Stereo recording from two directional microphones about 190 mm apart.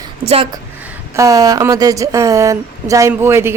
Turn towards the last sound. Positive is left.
turn(degrees=-15)  # may be behind; listen again after turning